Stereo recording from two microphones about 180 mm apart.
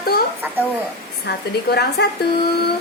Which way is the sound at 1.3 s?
70° left (ahead or behind).